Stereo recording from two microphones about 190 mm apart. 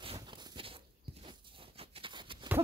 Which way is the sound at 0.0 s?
25° right (ahead or behind).